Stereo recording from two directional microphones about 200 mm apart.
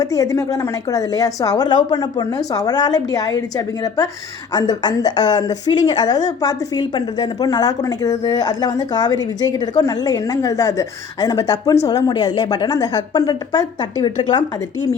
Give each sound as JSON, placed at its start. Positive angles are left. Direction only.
{"t": 0.0, "sound": "a woman's voice", "side_deg": 15}